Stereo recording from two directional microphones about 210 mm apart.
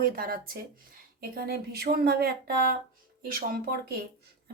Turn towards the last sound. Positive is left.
turn(degrees=-45)  # may be behind; listen again after turning